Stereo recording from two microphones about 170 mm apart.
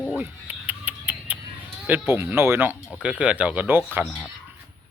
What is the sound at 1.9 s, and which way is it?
Speech, 10° right (ahead or behind).